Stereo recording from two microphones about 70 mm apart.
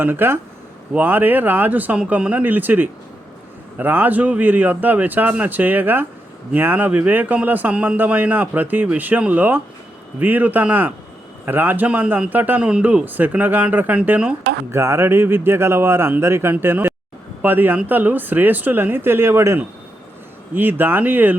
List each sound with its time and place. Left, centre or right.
0.0 s a man's voice: right
14.7 s a man's voice: right